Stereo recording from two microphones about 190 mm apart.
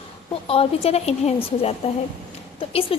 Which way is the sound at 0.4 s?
30° left (ahead or behind).